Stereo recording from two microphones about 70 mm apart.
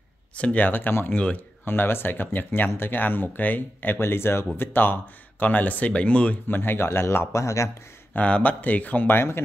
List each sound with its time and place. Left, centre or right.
0.4 s speech: centre
1.6 s speech: left
6.4 s speech: left
8.1 s speech: centre